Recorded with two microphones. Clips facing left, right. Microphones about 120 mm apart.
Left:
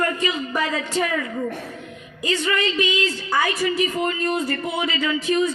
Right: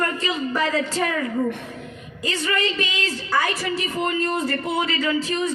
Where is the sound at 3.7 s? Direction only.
15° left (ahead or behind).